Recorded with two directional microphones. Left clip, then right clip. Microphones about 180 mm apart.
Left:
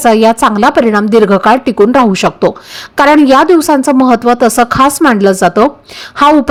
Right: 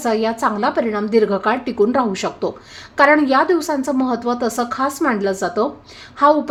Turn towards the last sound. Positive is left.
turn(degrees=45)  # may be behind; listen again after turning